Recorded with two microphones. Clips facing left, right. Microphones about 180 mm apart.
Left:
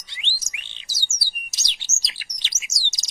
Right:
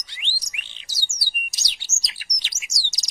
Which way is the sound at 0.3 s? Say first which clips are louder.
Right 1 dB; 25° left (ahead or behind).